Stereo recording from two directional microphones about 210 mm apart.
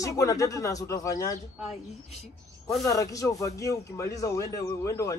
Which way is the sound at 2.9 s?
15° left (ahead or behind).